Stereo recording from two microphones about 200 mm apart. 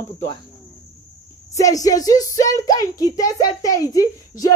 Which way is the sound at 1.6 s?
15° left (ahead or behind).